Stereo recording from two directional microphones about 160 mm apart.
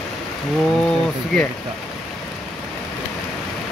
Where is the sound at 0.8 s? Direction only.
5° left (ahead or behind).